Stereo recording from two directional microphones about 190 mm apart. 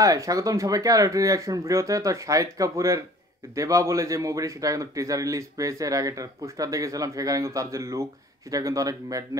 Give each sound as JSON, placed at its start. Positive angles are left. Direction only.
{"t": 0.0, "sound": "a man's voice", "side_deg": -15}